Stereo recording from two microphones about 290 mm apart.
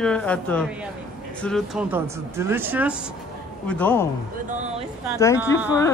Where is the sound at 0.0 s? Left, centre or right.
Centre.